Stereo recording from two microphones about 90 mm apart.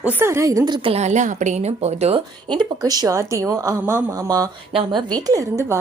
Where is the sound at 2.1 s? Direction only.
70° right (ahead or behind).